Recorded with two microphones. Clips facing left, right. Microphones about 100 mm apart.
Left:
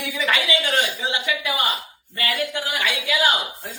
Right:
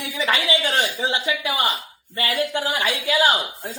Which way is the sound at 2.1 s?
25° right (ahead or behind).